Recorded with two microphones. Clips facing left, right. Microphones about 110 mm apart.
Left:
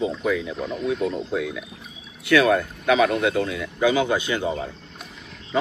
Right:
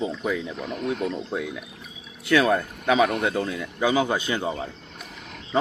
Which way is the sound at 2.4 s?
30° right (ahead or behind).